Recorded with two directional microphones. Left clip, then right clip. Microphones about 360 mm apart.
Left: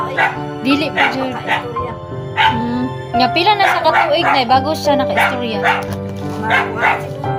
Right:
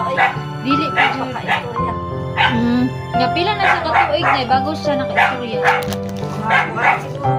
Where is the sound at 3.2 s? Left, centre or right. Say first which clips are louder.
Left 4 dB; left.